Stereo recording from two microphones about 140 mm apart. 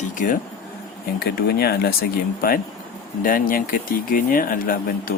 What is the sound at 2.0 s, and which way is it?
Speech, 90° left.